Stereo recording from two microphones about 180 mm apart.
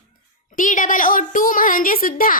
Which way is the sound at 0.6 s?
45° left (ahead or behind).